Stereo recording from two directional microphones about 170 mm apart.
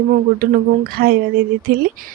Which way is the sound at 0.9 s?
60° right (ahead or behind).